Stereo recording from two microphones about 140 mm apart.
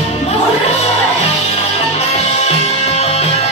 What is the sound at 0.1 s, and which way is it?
Music, 50° left (ahead or behind).